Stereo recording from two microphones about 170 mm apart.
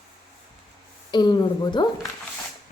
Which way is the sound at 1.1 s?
25° left (ahead or behind).